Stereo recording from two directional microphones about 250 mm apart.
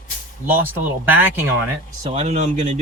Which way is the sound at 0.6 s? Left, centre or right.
Centre.